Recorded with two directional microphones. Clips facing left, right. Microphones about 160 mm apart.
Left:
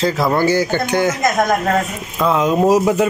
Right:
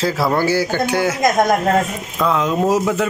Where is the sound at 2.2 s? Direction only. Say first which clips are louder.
Left 3 dB; 10° left (ahead or behind).